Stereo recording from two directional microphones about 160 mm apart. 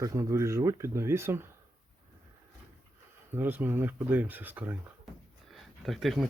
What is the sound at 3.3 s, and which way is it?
Speech, 10° right (ahead or behind).